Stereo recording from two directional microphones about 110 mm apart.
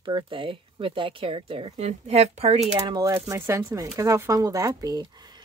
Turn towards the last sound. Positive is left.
turn(degrees=-35)  # may be behind; listen again after turning